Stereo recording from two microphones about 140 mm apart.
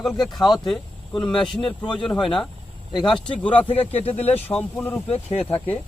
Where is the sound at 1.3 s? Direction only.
35° left (ahead or behind).